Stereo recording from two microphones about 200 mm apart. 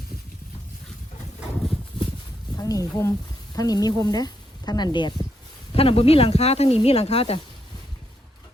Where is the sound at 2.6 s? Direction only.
20° left (ahead or behind).